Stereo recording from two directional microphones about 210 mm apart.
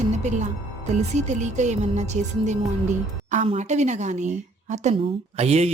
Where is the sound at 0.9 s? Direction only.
35° right (ahead or behind).